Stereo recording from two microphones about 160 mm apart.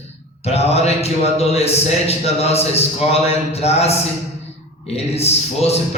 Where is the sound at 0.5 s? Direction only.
40° left (ahead or behind).